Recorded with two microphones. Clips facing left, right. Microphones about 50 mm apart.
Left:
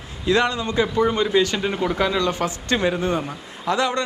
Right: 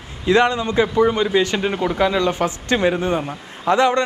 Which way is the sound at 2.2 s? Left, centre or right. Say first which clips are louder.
Right 3 dB; right.